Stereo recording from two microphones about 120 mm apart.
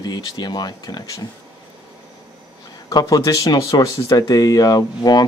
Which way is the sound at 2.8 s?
30° left (ahead or behind).